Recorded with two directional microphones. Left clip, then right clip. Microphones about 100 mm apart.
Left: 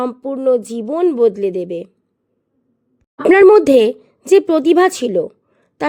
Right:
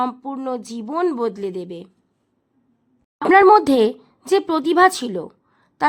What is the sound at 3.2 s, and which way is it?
A woman's voice, 50° left (ahead or behind).